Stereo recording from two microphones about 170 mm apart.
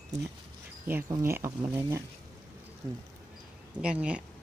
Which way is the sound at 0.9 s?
15° right (ahead or behind).